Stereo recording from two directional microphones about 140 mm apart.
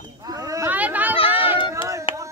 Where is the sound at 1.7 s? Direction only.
20° right (ahead or behind).